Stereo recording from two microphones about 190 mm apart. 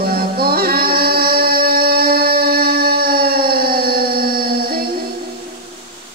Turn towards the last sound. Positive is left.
turn(degrees=-50)  # may be behind; listen again after turning